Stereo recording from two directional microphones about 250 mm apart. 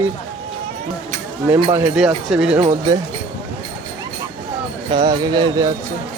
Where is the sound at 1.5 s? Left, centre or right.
Centre.